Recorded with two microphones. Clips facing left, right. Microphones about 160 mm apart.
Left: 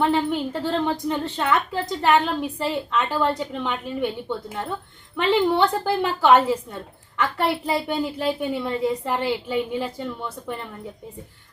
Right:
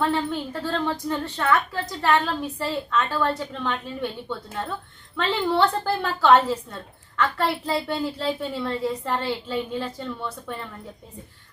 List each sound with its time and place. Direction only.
0.0 s a woman's voice: 15° left (ahead or behind)